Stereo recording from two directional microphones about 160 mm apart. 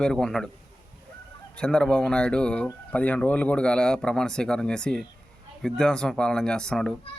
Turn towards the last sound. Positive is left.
turn(degrees=5)  # may be behind; listen again after turning